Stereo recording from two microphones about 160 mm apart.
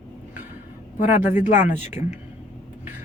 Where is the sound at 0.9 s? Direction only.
50° left (ahead or behind).